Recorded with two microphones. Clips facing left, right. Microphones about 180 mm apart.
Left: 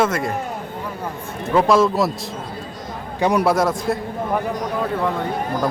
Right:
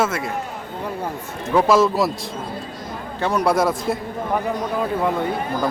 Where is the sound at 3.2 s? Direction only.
15° left (ahead or behind).